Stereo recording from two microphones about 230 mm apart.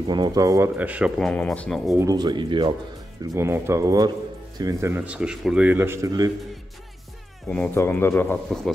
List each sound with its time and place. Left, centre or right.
0.0 s speech: centre
2.0 s speech: centre
7.4 s speech: centre